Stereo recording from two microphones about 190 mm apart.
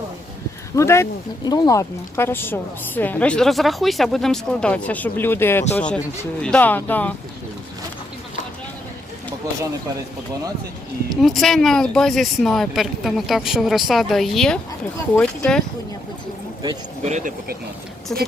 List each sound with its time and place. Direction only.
0.8 s a woman's voice: 15° left (ahead or behind)
11.2 s speech: centre (ahead or behind)
17.0 s speech: 40° right (ahead or behind)
18.1 s speech: 5° left (ahead or behind)